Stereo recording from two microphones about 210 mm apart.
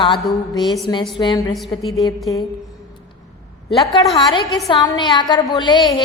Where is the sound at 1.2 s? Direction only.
20° left (ahead or behind).